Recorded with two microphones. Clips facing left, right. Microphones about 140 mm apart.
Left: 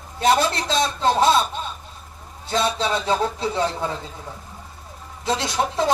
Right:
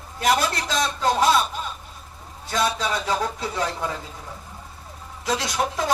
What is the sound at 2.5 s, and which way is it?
Speech, 25° left (ahead or behind).